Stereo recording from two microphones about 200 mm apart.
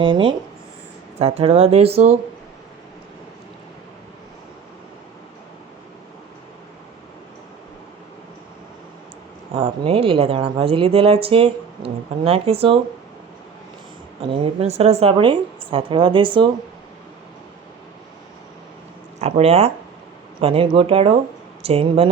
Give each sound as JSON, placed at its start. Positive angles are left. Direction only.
{"t": 0.0, "sound": "a woman's voice", "side_deg": -25}
{"t": 9.6, "sound": "a woman's voice", "side_deg": -30}
{"t": 14.2, "sound": "a woman's voice", "side_deg": -30}
{"t": 19.2, "sound": "a woman's voice", "side_deg": -30}